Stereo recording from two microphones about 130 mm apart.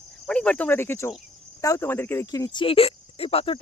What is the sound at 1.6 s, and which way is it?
Speech, 20° left (ahead or behind).